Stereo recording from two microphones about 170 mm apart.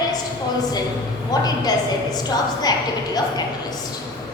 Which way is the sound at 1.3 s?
25° left (ahead or behind).